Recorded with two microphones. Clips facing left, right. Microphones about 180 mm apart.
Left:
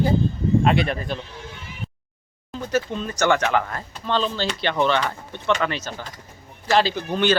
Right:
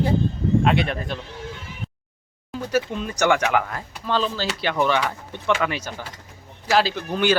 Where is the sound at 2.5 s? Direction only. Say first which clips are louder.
Right 1 dB; 10° right (ahead or behind).